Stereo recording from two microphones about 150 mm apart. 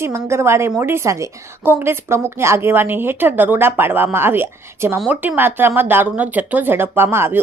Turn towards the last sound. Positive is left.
turn(degrees=-15)  # may be behind; listen again after turning